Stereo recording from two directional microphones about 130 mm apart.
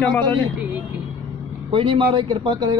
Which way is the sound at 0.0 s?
15° left (ahead or behind).